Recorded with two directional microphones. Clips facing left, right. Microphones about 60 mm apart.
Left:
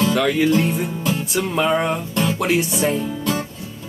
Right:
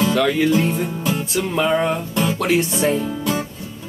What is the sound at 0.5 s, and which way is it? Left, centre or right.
Music, centre.